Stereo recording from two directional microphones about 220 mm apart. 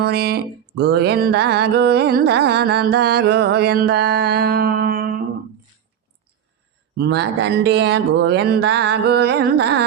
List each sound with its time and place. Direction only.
0.0 s music: 50° right (ahead or behind)
6.9 s music: 50° right (ahead or behind)